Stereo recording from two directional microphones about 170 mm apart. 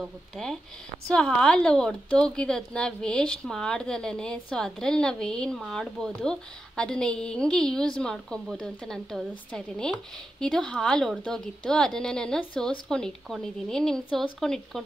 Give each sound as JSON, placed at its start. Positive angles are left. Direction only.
{"t": 0.0, "sound": "a woman's voice", "side_deg": 5}